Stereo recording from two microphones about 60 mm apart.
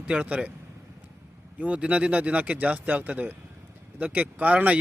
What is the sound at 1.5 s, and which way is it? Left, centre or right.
Speech, right.